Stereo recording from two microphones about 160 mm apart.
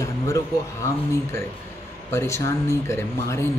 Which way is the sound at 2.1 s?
15° left (ahead or behind).